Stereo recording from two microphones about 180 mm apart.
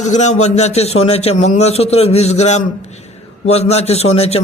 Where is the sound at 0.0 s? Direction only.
40° left (ahead or behind).